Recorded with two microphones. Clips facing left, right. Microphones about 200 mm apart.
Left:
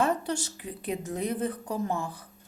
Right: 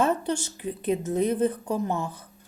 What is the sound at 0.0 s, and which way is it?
A woman's voice, 20° right (ahead or behind).